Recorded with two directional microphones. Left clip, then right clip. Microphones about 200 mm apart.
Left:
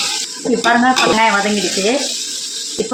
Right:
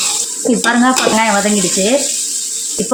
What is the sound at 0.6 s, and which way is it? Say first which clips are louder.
Speech: left 1 dB; 55° right (ahead or behind).